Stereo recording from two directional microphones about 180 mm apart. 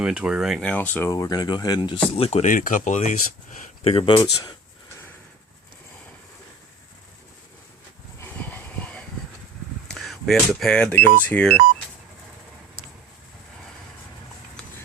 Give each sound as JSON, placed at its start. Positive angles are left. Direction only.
{"t": 0.0, "sound": "speech", "side_deg": -5}
{"t": 2.1, "sound": "speech", "side_deg": 35}
{"t": 3.8, "sound": "speech", "side_deg": 30}
{"t": 8.2, "sound": "a sound", "side_deg": 10}
{"t": 9.9, "sound": "speech", "side_deg": 0}